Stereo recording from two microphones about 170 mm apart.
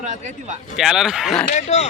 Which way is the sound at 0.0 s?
45° right (ahead or behind).